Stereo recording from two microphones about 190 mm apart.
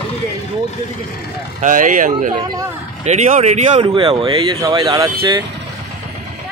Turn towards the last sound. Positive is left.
turn(degrees=-20)  # may be behind; listen again after turning